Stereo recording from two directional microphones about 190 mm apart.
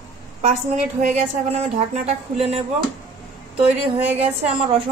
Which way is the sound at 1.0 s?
35° right (ahead or behind).